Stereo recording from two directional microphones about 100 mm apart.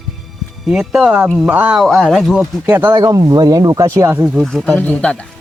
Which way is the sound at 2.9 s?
35° right (ahead or behind).